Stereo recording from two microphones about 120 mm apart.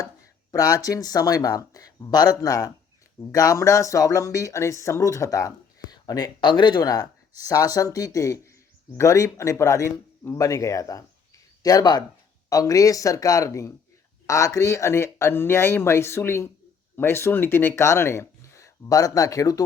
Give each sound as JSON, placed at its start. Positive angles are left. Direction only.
{"t": 0.5, "sound": "speech", "side_deg": 30}